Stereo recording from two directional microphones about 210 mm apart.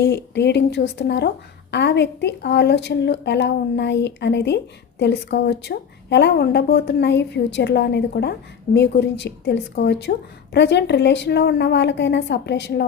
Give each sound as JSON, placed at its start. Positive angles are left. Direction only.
{"t": 0.0, "sound": "a woman's voice", "side_deg": 55}